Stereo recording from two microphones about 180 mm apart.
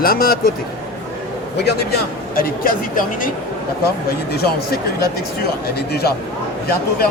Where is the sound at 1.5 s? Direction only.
65° left (ahead or behind).